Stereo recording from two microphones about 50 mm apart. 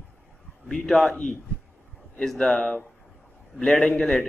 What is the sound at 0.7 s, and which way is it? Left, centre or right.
Speech, centre.